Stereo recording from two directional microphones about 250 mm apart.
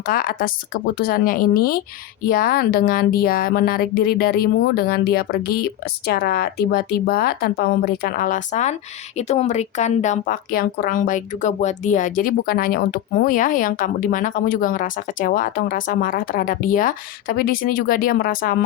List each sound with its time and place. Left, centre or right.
0.0 s a woman's voice: left